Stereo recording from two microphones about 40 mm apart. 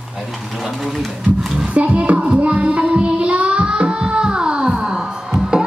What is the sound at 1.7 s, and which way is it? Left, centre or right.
Child singing, right.